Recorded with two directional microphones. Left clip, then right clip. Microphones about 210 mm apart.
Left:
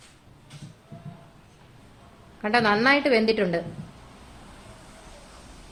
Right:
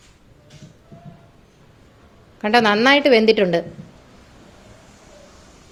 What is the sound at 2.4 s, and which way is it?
Speech, 35° right (ahead or behind).